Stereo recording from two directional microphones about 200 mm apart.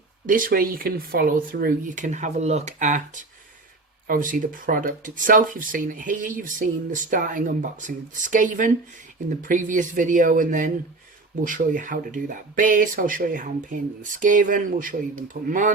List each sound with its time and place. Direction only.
0.3 s speech: 45° right (ahead or behind)